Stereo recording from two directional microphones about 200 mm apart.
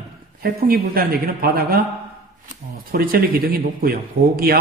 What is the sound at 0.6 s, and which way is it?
A man's voice, 50° right (ahead or behind).